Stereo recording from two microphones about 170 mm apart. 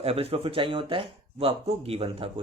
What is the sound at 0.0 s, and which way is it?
Speech, 35° right (ahead or behind).